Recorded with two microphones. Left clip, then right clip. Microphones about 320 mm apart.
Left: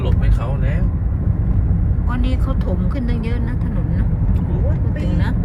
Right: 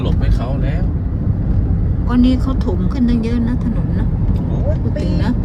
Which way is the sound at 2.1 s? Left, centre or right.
Centre.